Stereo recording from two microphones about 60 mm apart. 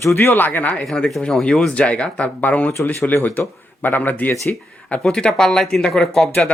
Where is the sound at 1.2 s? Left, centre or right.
Centre.